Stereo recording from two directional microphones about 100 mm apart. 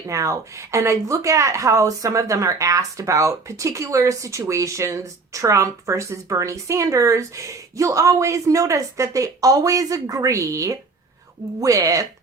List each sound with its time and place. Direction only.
0.1 s speech: 30° right (ahead or behind)